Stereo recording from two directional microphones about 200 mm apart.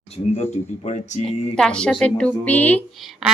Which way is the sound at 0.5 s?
35° left (ahead or behind).